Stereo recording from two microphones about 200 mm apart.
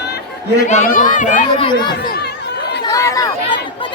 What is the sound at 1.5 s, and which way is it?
Speech, 25° left (ahead or behind).